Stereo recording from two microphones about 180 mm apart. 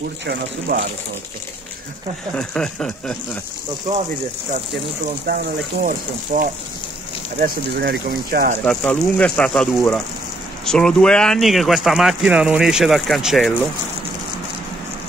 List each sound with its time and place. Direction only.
0.3 s speech: 75° right (ahead or behind)
2.3 s speech: 5° left (ahead or behind)
5.2 s speech: 55° right (ahead or behind)
8.6 s speech: 5° left (ahead or behind)